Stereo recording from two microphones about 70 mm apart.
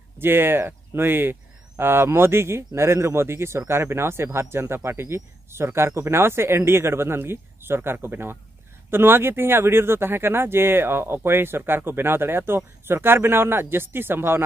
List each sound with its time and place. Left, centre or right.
0.2 s speech: right